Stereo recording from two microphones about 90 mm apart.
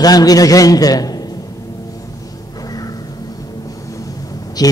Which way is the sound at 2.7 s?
40° left (ahead or behind).